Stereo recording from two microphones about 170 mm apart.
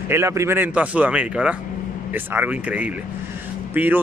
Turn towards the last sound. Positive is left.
turn(degrees=-10)  # may be behind; listen again after turning